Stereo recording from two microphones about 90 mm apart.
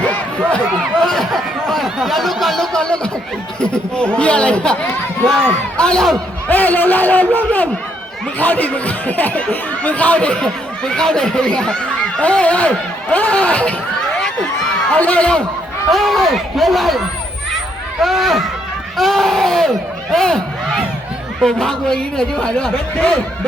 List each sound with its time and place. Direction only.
0.0 s crowd: 15° left (ahead or behind)
1.0 s speech: 5° left (ahead or behind)
6.5 s speech: 20° left (ahead or behind)
14.9 s speech: 15° left (ahead or behind)
18.0 s speech: centre (ahead or behind)